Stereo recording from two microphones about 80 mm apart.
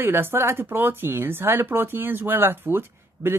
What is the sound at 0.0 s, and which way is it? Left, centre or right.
Speech, right.